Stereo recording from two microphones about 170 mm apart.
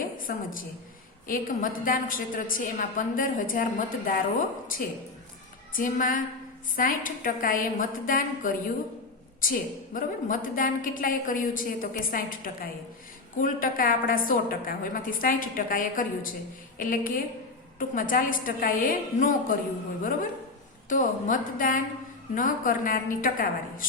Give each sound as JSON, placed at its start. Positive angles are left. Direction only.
{"t": 0.2, "sound": "a woman's voice", "side_deg": 55}
{"t": 20.9, "sound": "a woman's voice", "side_deg": 50}